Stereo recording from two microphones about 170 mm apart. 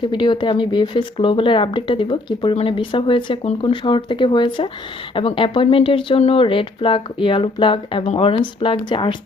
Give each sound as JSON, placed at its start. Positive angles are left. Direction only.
{"t": 0.0, "sound": "speech", "side_deg": 25}